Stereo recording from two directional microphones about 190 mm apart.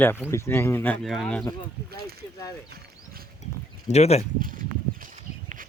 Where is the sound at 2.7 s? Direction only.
55° right (ahead or behind).